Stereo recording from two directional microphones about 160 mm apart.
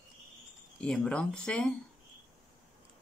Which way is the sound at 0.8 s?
5° left (ahead or behind).